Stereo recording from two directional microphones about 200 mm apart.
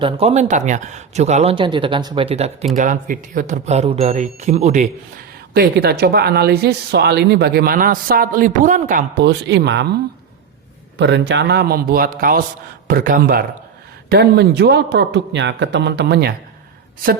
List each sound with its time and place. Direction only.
0.0 s speech: 30° right (ahead or behind)
5.5 s speech: 55° right (ahead or behind)
10.9 s speech: 60° right (ahead or behind)